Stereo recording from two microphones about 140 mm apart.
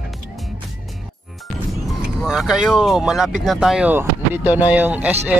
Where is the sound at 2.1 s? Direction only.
5° right (ahead or behind).